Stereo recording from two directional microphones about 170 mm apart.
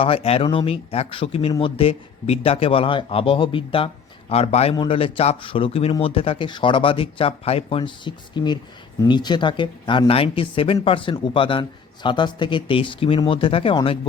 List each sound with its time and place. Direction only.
0.0 s speech: 35° left (ahead or behind)